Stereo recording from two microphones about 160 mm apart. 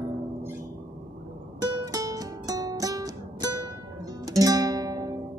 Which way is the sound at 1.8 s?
20° right (ahead or behind).